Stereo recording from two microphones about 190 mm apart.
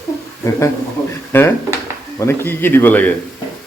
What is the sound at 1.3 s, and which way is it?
Speech, 10° left (ahead or behind).